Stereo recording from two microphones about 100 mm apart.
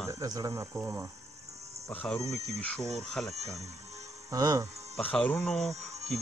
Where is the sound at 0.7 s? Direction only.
20° right (ahead or behind).